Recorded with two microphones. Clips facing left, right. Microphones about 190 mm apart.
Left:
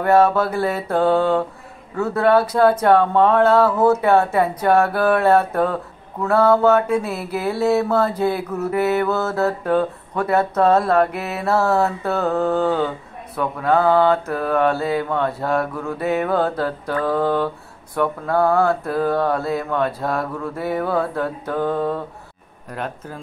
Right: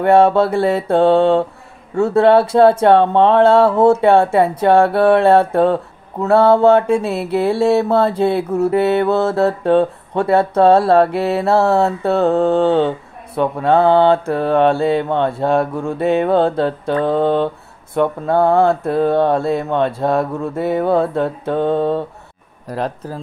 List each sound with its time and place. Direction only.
0.0 s mantra: 30° right (ahead or behind)
22.7 s speech: 35° right (ahead or behind)